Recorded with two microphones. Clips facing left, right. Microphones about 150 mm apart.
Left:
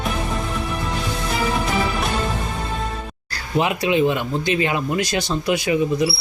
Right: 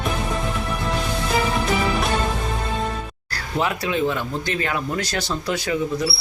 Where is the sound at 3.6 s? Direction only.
15° left (ahead or behind).